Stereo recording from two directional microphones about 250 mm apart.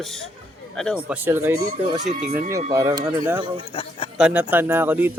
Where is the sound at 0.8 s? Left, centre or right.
Centre.